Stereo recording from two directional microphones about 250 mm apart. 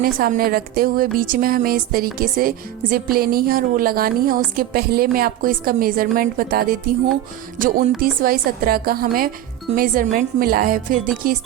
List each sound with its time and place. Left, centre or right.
0.0 s speech: right
8.2 s speech: right